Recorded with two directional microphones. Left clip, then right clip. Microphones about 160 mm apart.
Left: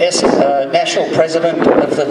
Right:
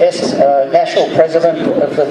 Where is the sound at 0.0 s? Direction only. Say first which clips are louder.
Right 1 dB; 35° left (ahead or behind).